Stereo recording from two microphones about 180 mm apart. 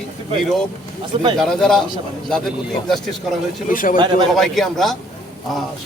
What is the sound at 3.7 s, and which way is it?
Speech, 50° left (ahead or behind).